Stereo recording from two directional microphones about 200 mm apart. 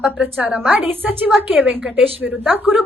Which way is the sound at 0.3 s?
5° right (ahead or behind).